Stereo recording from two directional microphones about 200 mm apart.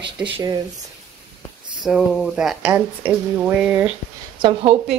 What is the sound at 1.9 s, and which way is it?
Speech, centre (ahead or behind).